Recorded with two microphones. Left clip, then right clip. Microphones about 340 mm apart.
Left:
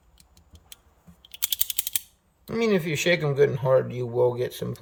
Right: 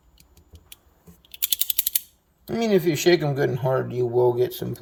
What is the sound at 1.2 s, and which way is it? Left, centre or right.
Typing, centre.